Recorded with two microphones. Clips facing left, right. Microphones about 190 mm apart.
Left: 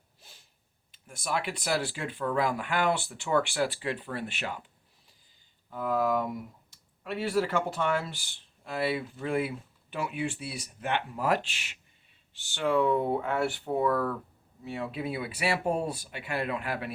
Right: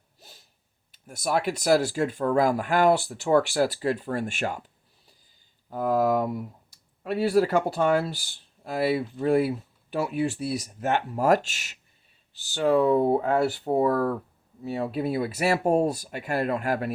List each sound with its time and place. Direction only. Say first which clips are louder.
0.2 s sniff: right 6 dB; 40° right (ahead or behind)
0.9 s speech: right 6 dB; 40° right (ahead or behind)
5.7 s speech: right 5 dB; 40° right (ahead or behind)